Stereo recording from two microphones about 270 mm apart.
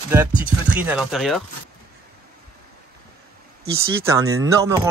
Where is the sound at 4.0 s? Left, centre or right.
Centre.